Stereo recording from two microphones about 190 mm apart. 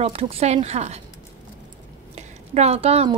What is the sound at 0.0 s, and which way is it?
A woman's voice, 30° right (ahead or behind).